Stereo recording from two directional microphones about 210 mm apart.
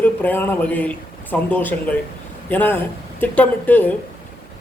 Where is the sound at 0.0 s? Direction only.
10° left (ahead or behind).